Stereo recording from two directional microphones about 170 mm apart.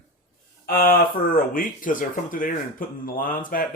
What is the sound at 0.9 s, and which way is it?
Speech, 55° left (ahead or behind).